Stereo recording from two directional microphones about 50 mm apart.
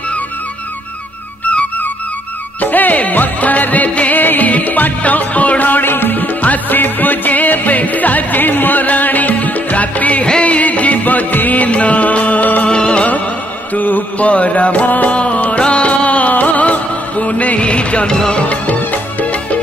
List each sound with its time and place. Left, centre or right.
2.6 s music: left
12.6 s music: centre
13.7 s music: left; by 18.4 s centre
18.4 s music: left